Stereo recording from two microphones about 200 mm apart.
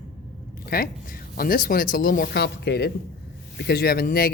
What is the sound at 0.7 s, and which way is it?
A man's voice, 45° left (ahead or behind).